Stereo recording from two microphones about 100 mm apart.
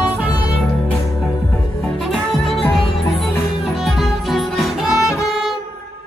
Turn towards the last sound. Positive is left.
turn(degrees=-5)  # may be behind; listen again after turning